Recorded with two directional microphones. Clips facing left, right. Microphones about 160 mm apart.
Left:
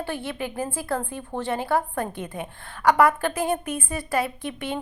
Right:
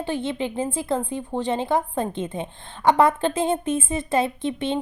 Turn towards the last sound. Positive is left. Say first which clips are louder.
# right 5 dB
turn(degrees=-25)  # may be behind; listen again after turning